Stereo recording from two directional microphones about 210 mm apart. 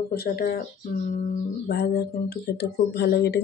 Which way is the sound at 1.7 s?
50° left (ahead or behind).